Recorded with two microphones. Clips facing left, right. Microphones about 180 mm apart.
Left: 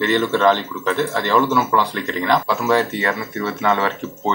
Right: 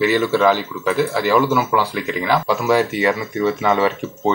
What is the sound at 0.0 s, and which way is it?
Speech, 5° right (ahead or behind).